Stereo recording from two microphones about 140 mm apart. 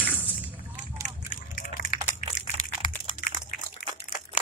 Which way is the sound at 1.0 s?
70° left (ahead or behind).